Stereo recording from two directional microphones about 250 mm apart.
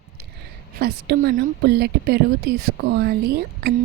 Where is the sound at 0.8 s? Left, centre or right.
Right.